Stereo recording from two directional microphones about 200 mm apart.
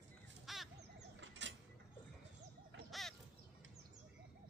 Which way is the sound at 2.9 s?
Centre (ahead or behind).